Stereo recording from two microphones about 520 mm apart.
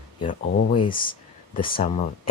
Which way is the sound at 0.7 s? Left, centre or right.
Centre.